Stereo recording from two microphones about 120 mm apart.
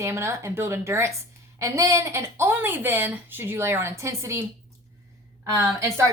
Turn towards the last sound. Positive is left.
turn(degrees=-25)  # may be behind; listen again after turning